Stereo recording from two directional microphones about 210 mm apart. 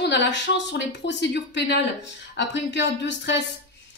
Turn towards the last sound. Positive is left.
turn(degrees=55)  # may be behind; listen again after turning